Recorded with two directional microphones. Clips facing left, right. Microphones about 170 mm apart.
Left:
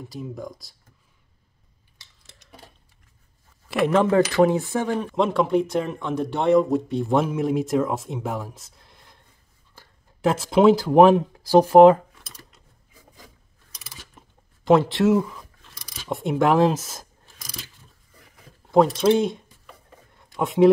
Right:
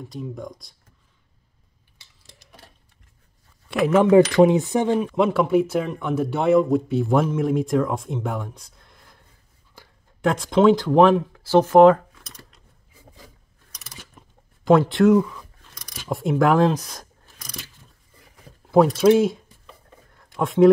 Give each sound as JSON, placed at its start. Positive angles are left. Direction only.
{"t": 0.0, "sound": "speech", "side_deg": 0}
{"t": 2.0, "sound": "a sound", "side_deg": -10}
{"t": 3.6, "sound": "speech", "side_deg": 0}
{"t": 4.9, "sound": "speech", "side_deg": -5}
{"t": 9.8, "sound": "a sound", "side_deg": -15}
{"t": 10.2, "sound": "speech", "side_deg": 5}
{"t": 14.6, "sound": "speech", "side_deg": 0}
{"t": 18.7, "sound": "speech", "side_deg": -5}
{"t": 20.2, "sound": "a sound", "side_deg": 5}